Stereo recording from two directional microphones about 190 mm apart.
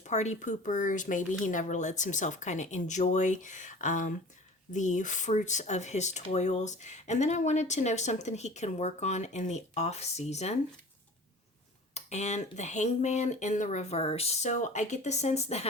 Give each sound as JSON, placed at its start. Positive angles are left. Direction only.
{"t": 0.0, "sound": "speech", "side_deg": 35}
{"t": 11.9, "sound": "speech", "side_deg": 35}